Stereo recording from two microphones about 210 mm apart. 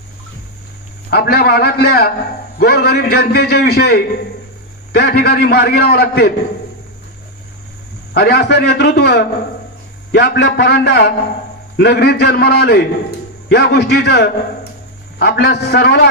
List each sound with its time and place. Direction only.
1.1 s a man's voice: 50° left (ahead or behind)
8.1 s a man's voice: 50° left (ahead or behind)